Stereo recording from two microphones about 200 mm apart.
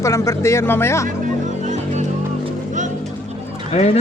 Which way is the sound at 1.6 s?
35° right (ahead or behind).